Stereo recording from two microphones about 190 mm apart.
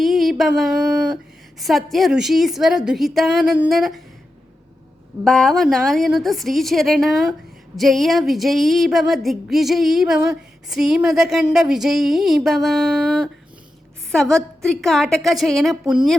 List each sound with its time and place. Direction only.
0.0 s a sound: centre (ahead or behind)
1.5 s music: centre (ahead or behind)
5.2 s music: 5° left (ahead or behind)